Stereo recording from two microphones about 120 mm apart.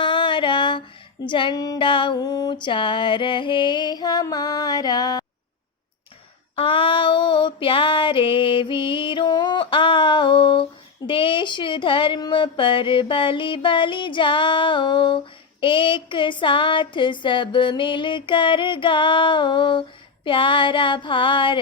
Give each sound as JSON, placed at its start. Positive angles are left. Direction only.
{"t": 0.0, "sound": "female singing", "side_deg": 45}
{"t": 6.6, "sound": "female singing", "side_deg": 45}